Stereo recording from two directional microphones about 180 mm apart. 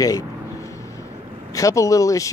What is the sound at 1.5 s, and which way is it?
Speech, 15° left (ahead or behind).